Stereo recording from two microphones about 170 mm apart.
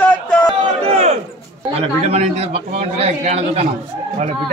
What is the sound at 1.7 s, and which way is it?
A man's voice, 35° right (ahead or behind).